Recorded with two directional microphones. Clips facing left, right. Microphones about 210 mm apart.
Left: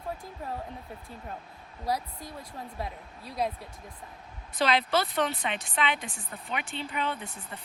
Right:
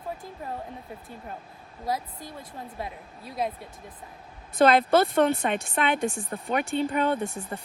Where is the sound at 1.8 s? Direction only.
Centre (ahead or behind).